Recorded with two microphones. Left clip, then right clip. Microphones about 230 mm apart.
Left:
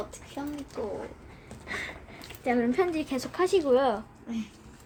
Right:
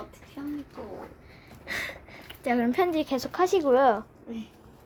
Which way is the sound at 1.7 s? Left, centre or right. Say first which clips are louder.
Right 3 dB; right.